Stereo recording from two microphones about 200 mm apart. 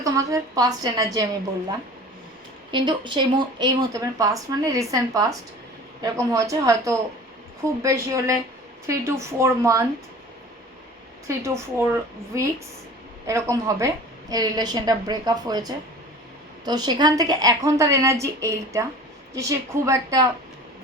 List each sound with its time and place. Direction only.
0.0 s speech: 15° right (ahead or behind)
2.7 s speech: 25° right (ahead or behind)
11.3 s a woman's voice: 15° right (ahead or behind)